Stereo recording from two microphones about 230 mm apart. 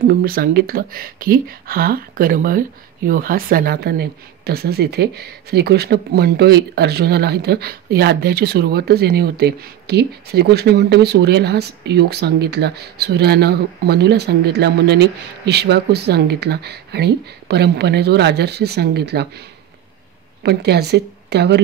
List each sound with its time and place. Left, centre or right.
0.0 s speech: right
20.4 s speech: right